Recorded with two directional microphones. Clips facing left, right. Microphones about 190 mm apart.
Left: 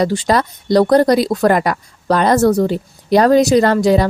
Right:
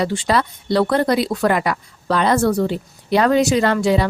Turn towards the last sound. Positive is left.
turn(degrees=40)  # may be behind; listen again after turning